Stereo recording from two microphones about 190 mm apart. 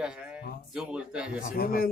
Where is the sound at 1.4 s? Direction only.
50° left (ahead or behind).